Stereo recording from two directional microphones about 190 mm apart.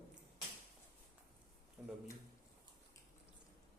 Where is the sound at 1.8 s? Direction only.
10° right (ahead or behind).